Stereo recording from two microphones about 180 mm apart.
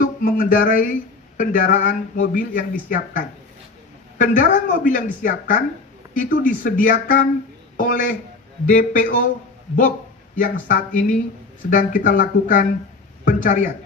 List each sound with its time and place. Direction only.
0.0 s speech: 50° left (ahead or behind)
10.3 s speech: 50° left (ahead or behind)